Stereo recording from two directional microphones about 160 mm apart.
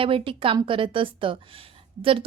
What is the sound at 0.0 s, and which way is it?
A woman's voice, 35° right (ahead or behind).